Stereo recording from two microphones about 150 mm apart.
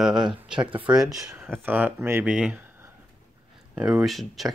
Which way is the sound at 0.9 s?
5° right (ahead or behind).